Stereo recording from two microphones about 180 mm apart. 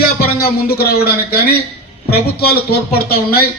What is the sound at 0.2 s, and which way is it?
Speech, 60° left (ahead or behind).